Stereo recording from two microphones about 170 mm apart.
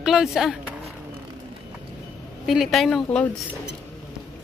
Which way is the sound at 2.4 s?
Centre (ahead or behind).